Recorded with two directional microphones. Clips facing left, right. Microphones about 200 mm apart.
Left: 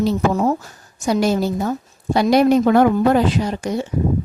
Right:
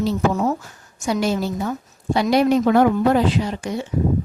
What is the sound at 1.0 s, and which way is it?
A woman's voice, 40° left (ahead or behind).